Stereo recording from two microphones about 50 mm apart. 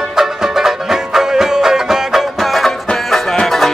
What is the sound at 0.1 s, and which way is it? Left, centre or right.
Music, centre.